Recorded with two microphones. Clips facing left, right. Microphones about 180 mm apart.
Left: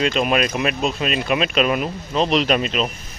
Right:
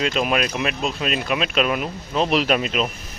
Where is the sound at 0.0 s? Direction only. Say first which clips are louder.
Left 2 dB; centre (ahead or behind).